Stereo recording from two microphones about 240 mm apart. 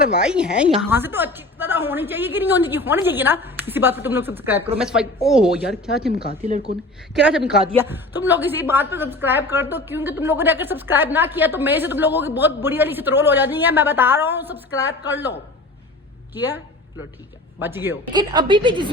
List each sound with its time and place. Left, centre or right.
0.2 s a woman's voice: centre
7.1 s a woman's voice: centre
16.3 s a woman's voice: centre
17.6 s a woman's voice: centre